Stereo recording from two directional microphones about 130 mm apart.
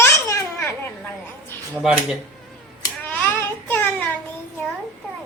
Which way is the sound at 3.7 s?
15° left (ahead or behind).